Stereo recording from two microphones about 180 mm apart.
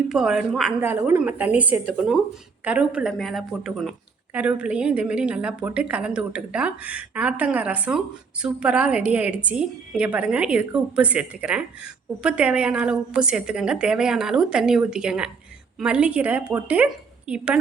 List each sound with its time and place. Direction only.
0.1 s a woman's voice: 5° right (ahead or behind)